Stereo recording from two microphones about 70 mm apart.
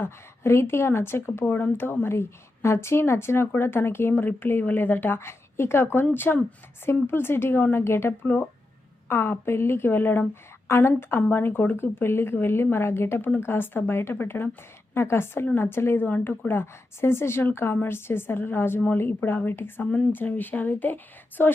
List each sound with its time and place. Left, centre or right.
0.0 s a woman's voice: left